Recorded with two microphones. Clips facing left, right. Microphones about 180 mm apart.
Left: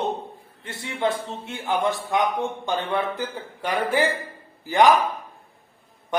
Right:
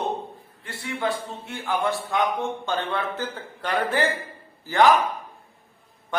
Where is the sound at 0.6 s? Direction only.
20° left (ahead or behind).